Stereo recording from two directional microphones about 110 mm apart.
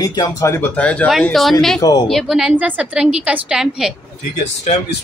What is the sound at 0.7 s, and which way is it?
Speech, 10° left (ahead or behind).